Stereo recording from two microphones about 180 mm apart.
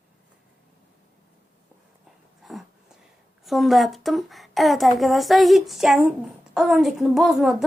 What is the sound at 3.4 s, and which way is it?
Speech, centre (ahead or behind).